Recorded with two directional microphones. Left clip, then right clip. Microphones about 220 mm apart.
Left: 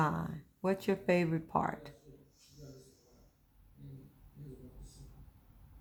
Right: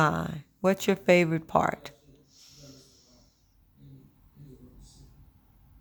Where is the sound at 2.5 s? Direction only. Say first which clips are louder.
Right 2 dB; 35° right (ahead or behind).